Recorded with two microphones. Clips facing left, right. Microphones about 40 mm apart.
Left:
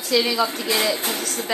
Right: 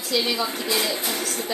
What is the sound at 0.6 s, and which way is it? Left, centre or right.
Speech, left.